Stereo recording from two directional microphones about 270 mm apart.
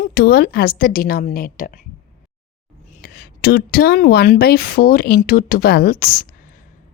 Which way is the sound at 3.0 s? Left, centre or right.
Left.